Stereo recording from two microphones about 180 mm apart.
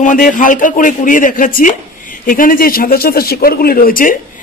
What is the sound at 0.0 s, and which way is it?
A man's voice, 45° left (ahead or behind).